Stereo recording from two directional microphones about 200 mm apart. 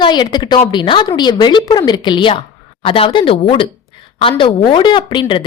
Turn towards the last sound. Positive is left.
turn(degrees=25)  # may be behind; listen again after turning